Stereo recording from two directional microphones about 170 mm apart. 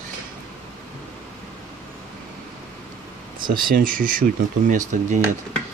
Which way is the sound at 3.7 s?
55° right (ahead or behind).